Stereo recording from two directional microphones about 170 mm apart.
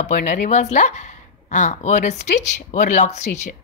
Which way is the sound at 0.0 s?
45° left (ahead or behind).